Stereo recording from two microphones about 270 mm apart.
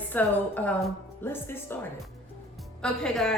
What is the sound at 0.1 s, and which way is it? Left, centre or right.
Speech, centre.